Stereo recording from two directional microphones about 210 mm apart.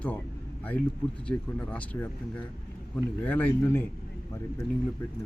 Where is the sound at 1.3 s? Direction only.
5° left (ahead or behind).